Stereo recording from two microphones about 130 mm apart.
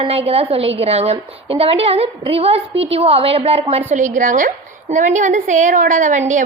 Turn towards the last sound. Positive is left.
turn(degrees=-70)  # may be behind; listen again after turning